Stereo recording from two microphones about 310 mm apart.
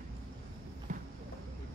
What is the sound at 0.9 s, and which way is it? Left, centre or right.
Clip-clop, right.